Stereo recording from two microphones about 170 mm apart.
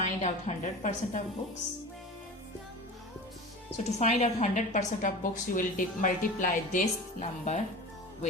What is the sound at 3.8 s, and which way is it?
A woman's voice, 45° left (ahead or behind).